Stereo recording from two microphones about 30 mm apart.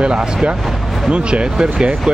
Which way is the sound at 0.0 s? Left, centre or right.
Right.